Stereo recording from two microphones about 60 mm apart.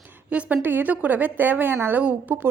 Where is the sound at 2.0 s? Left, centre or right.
Right.